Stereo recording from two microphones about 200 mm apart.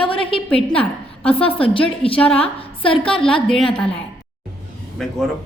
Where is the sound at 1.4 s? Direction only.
30° left (ahead or behind).